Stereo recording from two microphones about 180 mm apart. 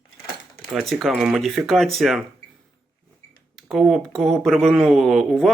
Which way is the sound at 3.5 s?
5° right (ahead or behind).